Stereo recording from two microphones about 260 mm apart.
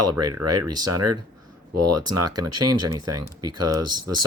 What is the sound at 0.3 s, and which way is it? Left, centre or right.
Speech, right.